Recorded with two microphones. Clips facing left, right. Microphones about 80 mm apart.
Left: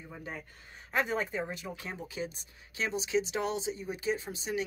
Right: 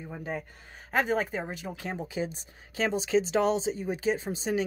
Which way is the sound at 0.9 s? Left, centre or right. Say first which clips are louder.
Right 4 dB; right.